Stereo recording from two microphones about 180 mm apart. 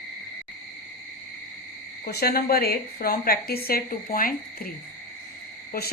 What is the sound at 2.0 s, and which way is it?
A woman's voice, 60° left (ahead or behind).